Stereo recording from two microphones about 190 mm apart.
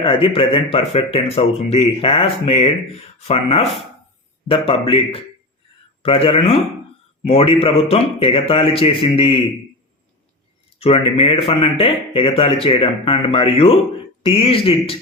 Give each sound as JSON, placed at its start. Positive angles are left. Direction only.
{"t": 0.0, "sound": "speech", "side_deg": 30}
{"t": 10.8, "sound": "speech", "side_deg": 30}